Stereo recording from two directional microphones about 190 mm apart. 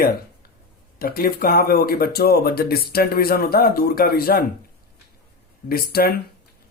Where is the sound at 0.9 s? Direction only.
50° left (ahead or behind).